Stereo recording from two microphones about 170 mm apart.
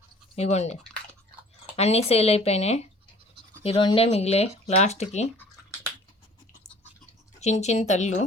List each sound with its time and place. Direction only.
0.3 s speech: 40° left (ahead or behind)
7.3 s speech: 40° left (ahead or behind)